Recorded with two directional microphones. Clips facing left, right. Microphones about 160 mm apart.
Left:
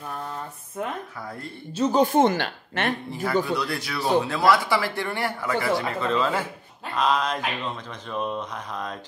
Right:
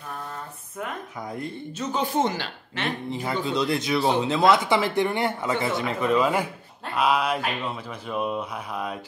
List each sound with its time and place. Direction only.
1.8 s speech: 35° left (ahead or behind)
2.1 s speech: 55° left (ahead or behind)
3.1 s speech: 20° right (ahead or behind)
7.0 s a sound: 10° right (ahead or behind)